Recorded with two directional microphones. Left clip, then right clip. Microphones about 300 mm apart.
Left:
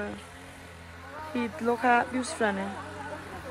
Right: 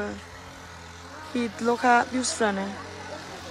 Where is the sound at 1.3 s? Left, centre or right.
Centre.